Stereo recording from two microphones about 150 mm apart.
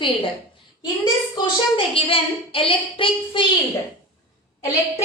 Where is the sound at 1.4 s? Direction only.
35° left (ahead or behind).